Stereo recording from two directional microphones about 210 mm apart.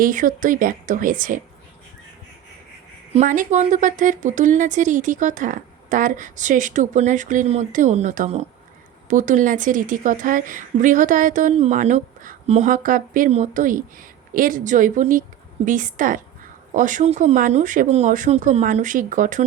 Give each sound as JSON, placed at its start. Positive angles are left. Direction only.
{"t": 0.0, "sound": "a woman's voice", "side_deg": -40}
{"t": 3.1, "sound": "a woman's voice", "side_deg": -35}